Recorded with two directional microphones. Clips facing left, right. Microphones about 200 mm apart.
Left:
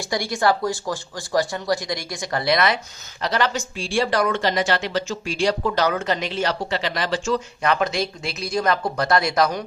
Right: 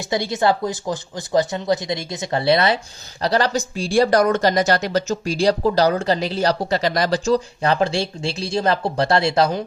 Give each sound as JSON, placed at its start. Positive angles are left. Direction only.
{"t": 0.1, "sound": "speech", "side_deg": -20}